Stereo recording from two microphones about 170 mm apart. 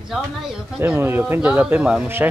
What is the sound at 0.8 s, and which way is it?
Speech, 15° right (ahead or behind).